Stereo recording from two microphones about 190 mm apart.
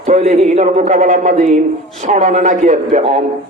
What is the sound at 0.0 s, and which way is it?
A man's voice, 35° right (ahead or behind).